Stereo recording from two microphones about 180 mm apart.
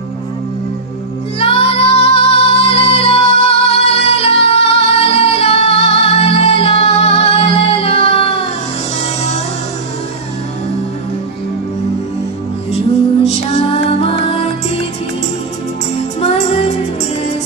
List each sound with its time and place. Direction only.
1.4 s child singing: 30° left (ahead or behind)
4.7 s music: 35° left (ahead or behind)
13.2 s music: 35° left (ahead or behind)
16.2 s music: 35° left (ahead or behind)